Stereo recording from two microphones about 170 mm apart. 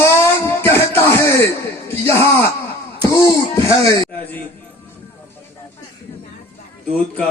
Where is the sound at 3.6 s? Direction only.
20° left (ahead or behind).